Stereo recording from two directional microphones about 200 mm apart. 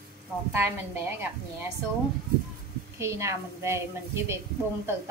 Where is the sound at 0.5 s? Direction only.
10° right (ahead or behind).